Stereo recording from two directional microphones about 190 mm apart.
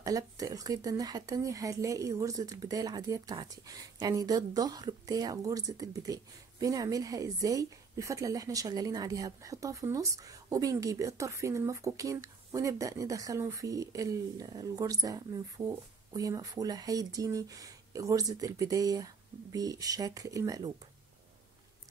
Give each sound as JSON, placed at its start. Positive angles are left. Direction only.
{"t": 0.0, "sound": "speech", "side_deg": -20}